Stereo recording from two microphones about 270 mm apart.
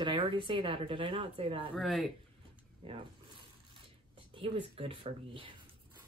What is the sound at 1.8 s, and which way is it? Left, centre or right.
Speech, centre.